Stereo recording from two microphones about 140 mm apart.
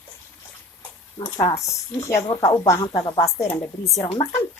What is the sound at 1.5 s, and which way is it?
Speech, 20° left (ahead or behind).